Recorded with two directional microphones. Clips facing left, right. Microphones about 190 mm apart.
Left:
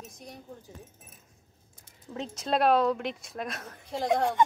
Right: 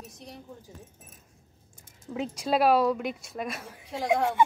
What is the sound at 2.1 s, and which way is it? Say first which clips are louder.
A woman's voice: right 2 dB; 5° right (ahead or behind).